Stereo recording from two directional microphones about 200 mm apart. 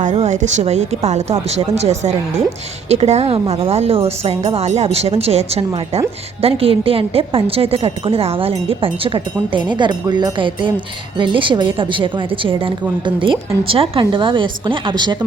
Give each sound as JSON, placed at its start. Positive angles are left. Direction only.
{"t": 0.0, "sound": "a woman's voice", "side_deg": -35}